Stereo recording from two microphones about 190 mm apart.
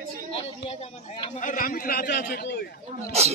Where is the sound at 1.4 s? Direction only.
45° left (ahead or behind).